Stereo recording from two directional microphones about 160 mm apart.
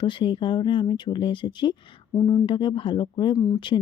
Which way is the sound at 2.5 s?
30° left (ahead or behind).